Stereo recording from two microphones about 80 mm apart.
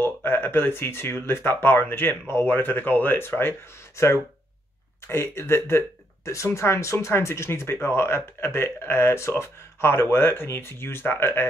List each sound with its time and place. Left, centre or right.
0.0 s speech: left